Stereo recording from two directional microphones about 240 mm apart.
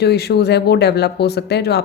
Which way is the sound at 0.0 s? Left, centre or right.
Left.